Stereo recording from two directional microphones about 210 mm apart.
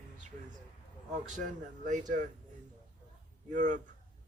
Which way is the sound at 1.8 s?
35° right (ahead or behind).